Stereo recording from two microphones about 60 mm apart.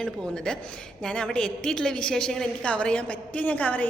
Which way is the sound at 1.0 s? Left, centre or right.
Centre.